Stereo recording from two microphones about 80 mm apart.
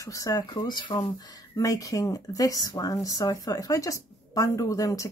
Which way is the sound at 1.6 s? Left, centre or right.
Left.